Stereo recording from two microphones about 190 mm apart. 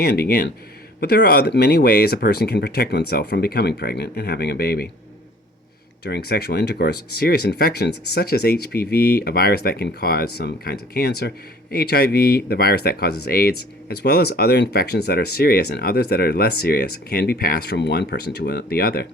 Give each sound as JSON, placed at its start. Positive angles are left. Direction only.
{"t": 0.0, "sound": "speech", "side_deg": 55}
{"t": 6.1, "sound": "speech", "side_deg": 60}